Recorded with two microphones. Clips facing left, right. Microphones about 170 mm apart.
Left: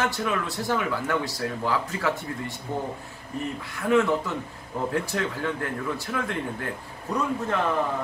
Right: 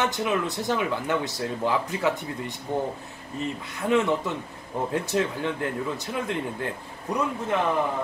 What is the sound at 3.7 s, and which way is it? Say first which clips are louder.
Speech: left 1 dB; 20° right (ahead or behind).